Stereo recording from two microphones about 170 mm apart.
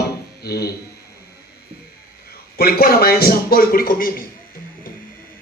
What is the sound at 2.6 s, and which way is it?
A man's voice, 65° left (ahead or behind).